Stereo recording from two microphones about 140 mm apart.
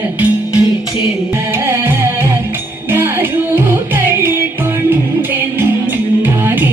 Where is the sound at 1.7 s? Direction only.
15° right (ahead or behind).